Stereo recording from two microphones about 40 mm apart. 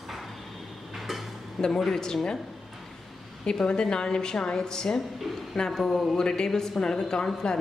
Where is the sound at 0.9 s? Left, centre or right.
Centre.